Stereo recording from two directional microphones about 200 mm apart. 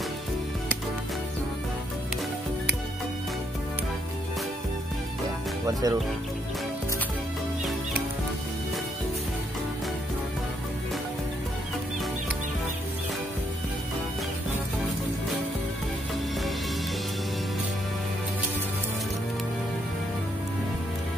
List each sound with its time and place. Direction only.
5.7 s speech: 20° right (ahead or behind)